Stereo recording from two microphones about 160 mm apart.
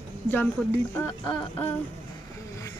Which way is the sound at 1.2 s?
30° left (ahead or behind).